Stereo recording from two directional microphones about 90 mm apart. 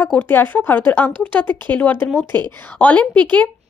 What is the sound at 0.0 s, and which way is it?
Speech, 20° left (ahead or behind).